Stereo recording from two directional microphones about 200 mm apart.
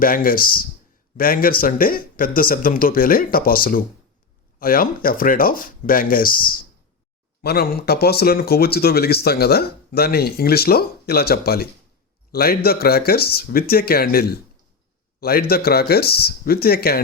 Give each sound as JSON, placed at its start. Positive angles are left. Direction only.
{"t": 0.0, "sound": "speech", "side_deg": 45}